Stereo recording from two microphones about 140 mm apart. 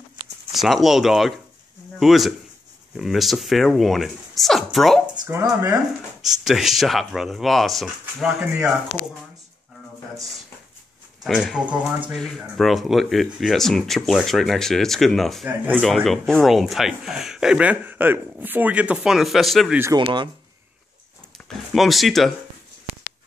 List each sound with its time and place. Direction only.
0.5 s speech: centre (ahead or behind)
5.3 s speech: 15° right (ahead or behind)
6.2 s speech: centre (ahead or behind)
11.2 s speech: 5° right (ahead or behind)
12.2 s speech: 5° left (ahead or behind)
15.4 s speech: 10° right (ahead or behind)
15.8 s speech: centre (ahead or behind)
20.0 s speech: 35° right (ahead or behind)
21.7 s speech: centre (ahead or behind)